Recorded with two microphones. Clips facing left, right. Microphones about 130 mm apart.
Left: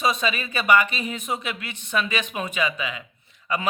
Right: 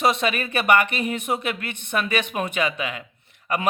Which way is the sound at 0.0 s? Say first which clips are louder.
Right 3 dB; 65° right (ahead or behind).